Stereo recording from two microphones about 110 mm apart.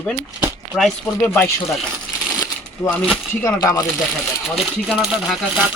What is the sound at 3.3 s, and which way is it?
Speech, 25° left (ahead or behind).